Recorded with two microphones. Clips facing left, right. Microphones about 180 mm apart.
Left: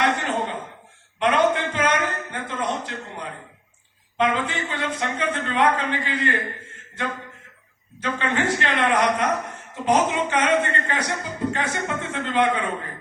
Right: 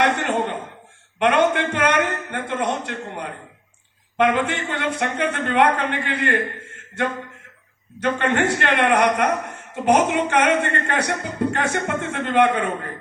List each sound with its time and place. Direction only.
0.0 s a sound: 65° right (ahead or behind)
1.2 s speech: 65° right (ahead or behind)
7.9 s a woman's voice: 65° right (ahead or behind)